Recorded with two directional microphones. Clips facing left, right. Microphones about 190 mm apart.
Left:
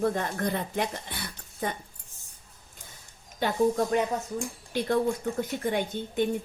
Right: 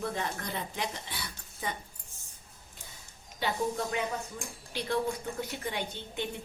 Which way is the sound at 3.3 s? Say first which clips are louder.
Left 7 dB; 45° left (ahead or behind).